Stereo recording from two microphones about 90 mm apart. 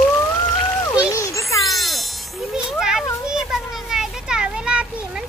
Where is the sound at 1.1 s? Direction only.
35° left (ahead or behind).